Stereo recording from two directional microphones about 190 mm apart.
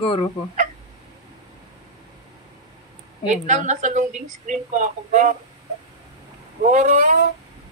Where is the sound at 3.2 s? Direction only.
40° right (ahead or behind).